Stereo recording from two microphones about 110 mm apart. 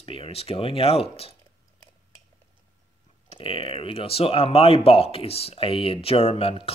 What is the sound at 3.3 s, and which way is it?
Speech, 60° left (ahead or behind).